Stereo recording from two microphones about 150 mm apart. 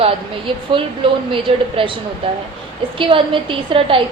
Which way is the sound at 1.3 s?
35° right (ahead or behind).